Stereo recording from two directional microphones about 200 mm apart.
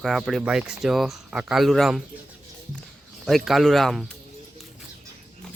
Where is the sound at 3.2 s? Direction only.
Centre (ahead or behind).